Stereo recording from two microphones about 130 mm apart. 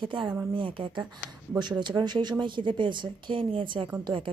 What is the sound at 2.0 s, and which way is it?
A woman's voice, 35° right (ahead or behind).